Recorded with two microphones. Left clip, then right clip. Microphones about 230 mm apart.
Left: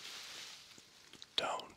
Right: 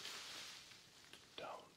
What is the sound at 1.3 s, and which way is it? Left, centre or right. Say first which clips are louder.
Whispering: left 14 dB; left.